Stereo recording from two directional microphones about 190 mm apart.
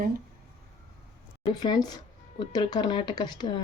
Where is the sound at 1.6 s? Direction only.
20° left (ahead or behind).